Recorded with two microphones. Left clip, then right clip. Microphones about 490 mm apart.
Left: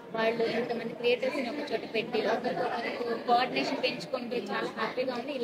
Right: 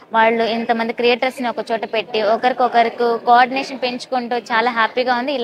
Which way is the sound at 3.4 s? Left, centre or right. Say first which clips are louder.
Right 13 dB; right.